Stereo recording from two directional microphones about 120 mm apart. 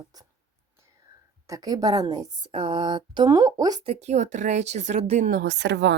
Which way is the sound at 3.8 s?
60° right (ahead or behind).